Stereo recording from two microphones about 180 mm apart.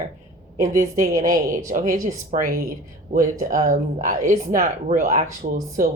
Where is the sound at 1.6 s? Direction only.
50° right (ahead or behind).